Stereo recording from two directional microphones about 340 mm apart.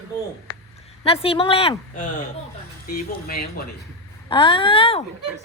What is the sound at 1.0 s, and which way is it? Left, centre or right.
A woman's voice, centre.